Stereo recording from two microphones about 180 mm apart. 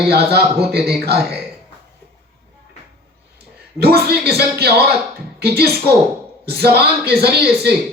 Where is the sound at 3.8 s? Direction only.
60° right (ahead or behind).